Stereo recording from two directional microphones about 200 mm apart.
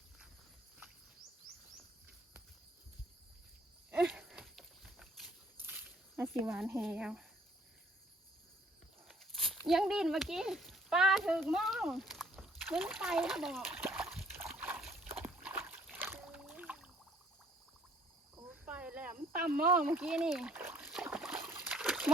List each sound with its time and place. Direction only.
3.9 s a sound: 10° right (ahead or behind)
5.5 s snake: 10° right (ahead or behind)
9.0 s speech: centre (ahead or behind)
13.8 s splash: 5° right (ahead or behind)
15.2 s slosh: 10° right (ahead or behind)
16.1 s rowboat: centre (ahead or behind)
18.5 s cricket: 5° right (ahead or behind)
19.3 s speech: 45° right (ahead or behind)
19.9 s trickle: 10° right (ahead or behind)